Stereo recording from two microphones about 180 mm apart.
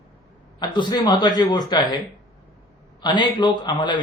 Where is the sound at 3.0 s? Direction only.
25° left (ahead or behind).